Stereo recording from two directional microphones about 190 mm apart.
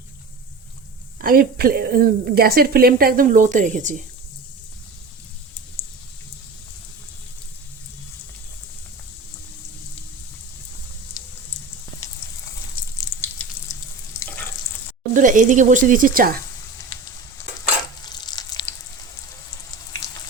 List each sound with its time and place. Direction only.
1.2 s a woman's voice: 50° right (ahead or behind)
13.0 s water: 15° left (ahead or behind)
14.2 s water tap: 10° left (ahead or behind)
15.1 s speech: 45° right (ahead or behind)
18.0 s frying: 20° left (ahead or behind)